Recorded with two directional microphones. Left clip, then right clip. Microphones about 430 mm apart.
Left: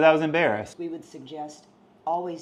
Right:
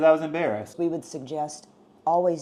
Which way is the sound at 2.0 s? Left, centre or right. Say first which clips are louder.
Right 6 dB; right.